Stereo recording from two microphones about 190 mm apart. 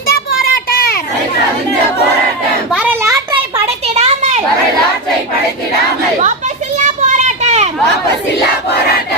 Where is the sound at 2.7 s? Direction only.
10° right (ahead or behind).